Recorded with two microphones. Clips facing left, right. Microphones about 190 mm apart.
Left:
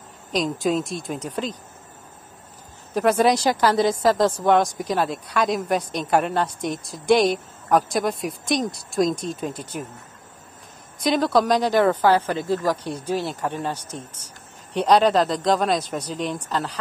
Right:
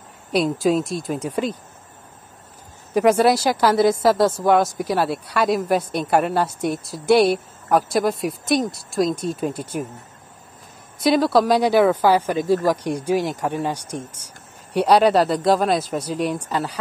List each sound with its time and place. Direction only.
0.3 s speech: 5° right (ahead or behind)
2.9 s a woman's voice: 10° right (ahead or behind)
9.6 s speech: 45° right (ahead or behind)
11.0 s a woman's voice: 5° right (ahead or behind)